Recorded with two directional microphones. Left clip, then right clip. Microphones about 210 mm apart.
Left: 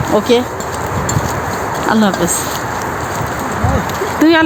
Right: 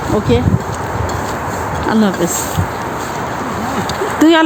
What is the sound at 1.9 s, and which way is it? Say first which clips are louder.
Speech: left 2 dB; 10° right (ahead or behind).